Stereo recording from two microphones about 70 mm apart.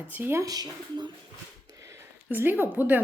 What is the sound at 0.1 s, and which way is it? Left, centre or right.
Speech, right.